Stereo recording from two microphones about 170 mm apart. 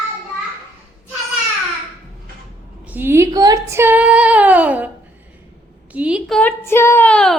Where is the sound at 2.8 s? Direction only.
10° right (ahead or behind).